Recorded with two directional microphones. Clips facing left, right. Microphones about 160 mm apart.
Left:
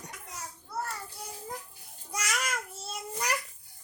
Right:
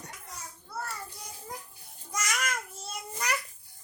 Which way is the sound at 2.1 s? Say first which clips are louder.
Right 1 dB; 10° left (ahead or behind).